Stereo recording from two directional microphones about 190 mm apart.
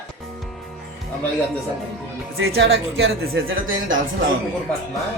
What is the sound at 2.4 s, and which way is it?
Speech, 80° right.